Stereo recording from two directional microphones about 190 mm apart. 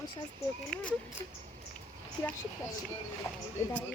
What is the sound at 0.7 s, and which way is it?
Speech, 5° left (ahead or behind).